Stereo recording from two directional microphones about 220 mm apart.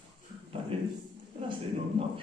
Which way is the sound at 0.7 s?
25° right (ahead or behind).